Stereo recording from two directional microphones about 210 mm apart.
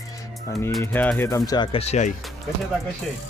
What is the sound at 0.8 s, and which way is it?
Speech, 10° left (ahead or behind).